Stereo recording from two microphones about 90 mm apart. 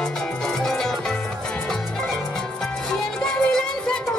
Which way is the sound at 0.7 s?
5° left (ahead or behind).